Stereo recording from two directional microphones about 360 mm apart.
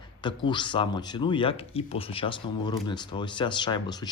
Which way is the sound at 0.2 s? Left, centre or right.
Centre.